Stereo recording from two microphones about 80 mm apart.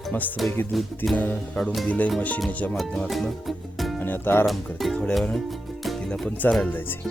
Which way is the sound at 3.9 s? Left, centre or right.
Left.